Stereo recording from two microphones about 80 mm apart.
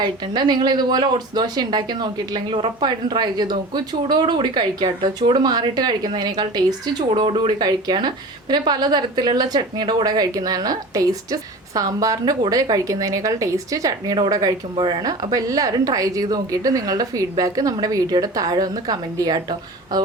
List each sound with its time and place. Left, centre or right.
0.0 s speech: right
7.2 s a woman's voice: right
14.8 s speech: right
15.0 s a woman's voice: right